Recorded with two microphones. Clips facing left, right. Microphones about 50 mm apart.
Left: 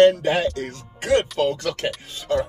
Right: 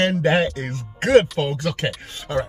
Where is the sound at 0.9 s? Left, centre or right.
Right.